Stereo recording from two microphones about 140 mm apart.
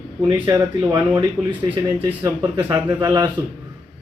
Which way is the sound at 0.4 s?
25° right (ahead or behind).